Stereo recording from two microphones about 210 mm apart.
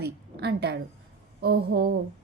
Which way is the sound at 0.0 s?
50° right (ahead or behind).